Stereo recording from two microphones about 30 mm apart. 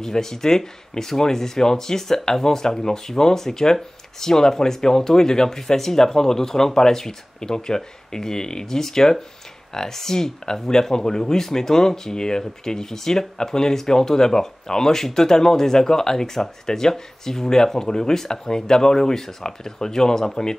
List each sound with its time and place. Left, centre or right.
0.0 s speech: centre